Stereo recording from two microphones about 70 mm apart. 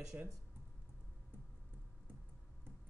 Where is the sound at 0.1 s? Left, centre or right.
Right.